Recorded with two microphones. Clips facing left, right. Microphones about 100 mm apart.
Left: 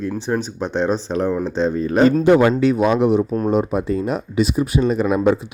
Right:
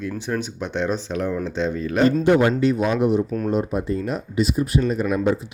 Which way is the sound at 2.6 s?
75° left (ahead or behind).